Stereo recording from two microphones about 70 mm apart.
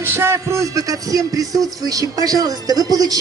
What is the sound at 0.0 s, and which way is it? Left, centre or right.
A woman's voice, right.